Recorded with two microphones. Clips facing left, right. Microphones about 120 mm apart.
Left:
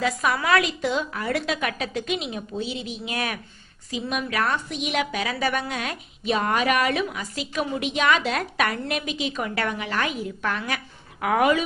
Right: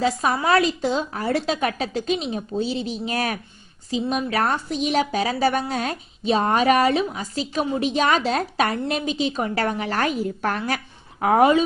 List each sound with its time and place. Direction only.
0.0 s a woman's voice: 30° right (ahead or behind)